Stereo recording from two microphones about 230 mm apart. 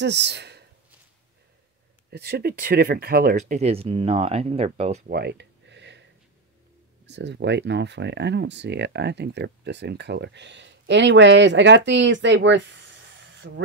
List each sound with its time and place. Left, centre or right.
0.0 s speech: right
2.0 s speech: right
5.1 s a sound: right
7.1 s speech: right